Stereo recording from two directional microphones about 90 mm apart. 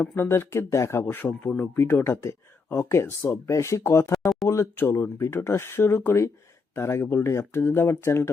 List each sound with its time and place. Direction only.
0.2 s speech: 25° left (ahead or behind)
1.0 s speech: 20° left (ahead or behind)
4.2 s a sound: centre (ahead or behind)
4.4 s speech: 35° left (ahead or behind)